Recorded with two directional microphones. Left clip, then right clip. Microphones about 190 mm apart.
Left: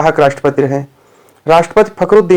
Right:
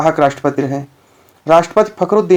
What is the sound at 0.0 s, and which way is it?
Speech, 30° left (ahead or behind).